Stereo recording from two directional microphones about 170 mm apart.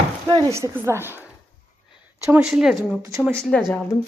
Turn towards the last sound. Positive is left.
turn(degrees=0)  # may be behind; listen again after turning